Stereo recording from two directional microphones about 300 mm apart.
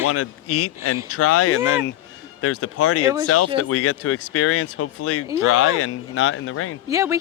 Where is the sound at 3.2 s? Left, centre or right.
Left.